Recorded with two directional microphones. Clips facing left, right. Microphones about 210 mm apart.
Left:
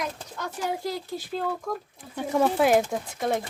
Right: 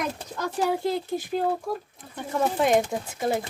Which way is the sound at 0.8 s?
20° right (ahead or behind).